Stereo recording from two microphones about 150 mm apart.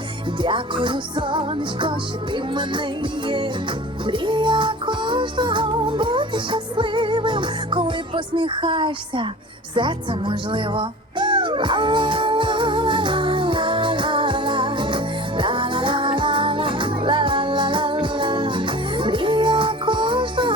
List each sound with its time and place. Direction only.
0.3 s music: 35° right (ahead or behind)